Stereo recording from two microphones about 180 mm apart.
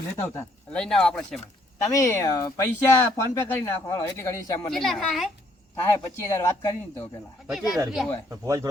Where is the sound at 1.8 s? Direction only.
15° left (ahead or behind).